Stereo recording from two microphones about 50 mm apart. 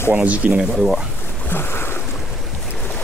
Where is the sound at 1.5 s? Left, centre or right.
Left.